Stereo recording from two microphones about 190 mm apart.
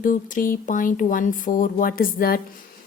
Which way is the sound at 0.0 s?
45° left (ahead or behind).